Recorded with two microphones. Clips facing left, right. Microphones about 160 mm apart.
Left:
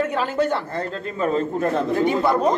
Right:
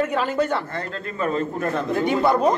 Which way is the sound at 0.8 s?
30° left (ahead or behind).